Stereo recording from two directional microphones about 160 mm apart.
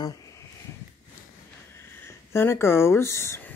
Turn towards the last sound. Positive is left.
turn(degrees=15)  # may be behind; listen again after turning